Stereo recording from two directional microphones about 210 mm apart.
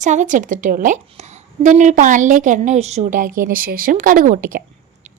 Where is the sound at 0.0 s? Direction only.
35° right (ahead or behind).